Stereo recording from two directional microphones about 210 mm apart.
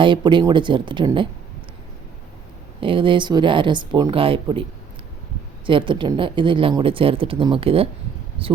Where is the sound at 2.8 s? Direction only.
25° right (ahead or behind).